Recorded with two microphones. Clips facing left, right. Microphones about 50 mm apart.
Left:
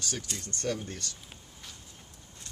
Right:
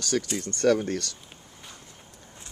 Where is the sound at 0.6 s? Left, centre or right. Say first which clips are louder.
Right 12 dB; right.